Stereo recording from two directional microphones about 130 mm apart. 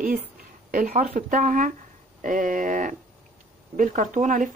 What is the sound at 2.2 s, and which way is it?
A woman's voice, 90° right.